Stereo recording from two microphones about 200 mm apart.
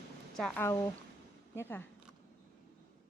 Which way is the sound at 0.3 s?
5° left (ahead or behind).